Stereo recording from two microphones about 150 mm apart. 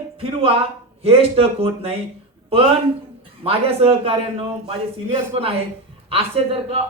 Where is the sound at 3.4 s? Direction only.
40° right (ahead or behind).